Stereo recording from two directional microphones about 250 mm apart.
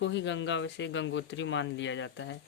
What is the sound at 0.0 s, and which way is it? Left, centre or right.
Speech, left.